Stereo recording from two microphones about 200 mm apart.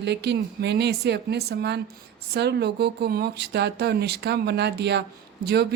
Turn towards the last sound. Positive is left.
turn(degrees=-55)  # may be behind; listen again after turning